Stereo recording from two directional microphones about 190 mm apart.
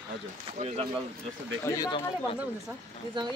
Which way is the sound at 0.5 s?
35° right (ahead or behind).